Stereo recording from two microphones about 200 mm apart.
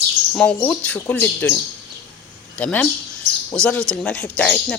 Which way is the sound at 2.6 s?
5° left (ahead or behind).